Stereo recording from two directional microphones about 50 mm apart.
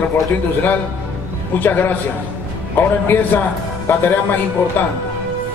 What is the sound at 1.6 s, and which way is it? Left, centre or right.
Speech, left.